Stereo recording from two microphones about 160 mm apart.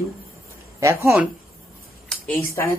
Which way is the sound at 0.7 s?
20° right (ahead or behind).